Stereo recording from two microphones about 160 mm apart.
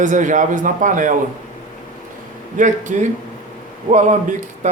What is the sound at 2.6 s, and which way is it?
A man's voice, 50° right (ahead or behind).